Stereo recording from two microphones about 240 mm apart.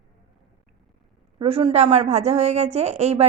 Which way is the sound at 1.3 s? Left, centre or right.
Right.